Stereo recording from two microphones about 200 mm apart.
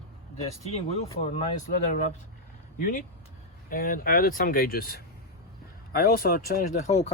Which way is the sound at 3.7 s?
45° left (ahead or behind).